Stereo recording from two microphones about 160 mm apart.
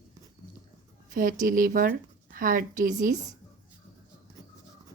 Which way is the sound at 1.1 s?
60° right (ahead or behind).